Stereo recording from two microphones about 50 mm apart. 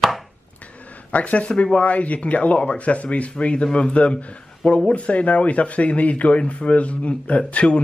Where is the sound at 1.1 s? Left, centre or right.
Left.